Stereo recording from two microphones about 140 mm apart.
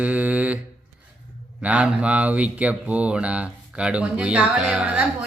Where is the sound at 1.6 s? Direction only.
10° right (ahead or behind).